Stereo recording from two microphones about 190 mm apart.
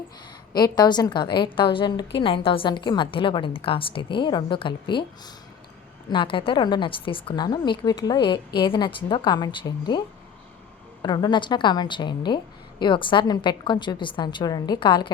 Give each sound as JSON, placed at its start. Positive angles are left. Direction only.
{"t": 0.5, "sound": "a woman's voice", "side_deg": 20}
{"t": 11.0, "sound": "a woman's voice", "side_deg": 25}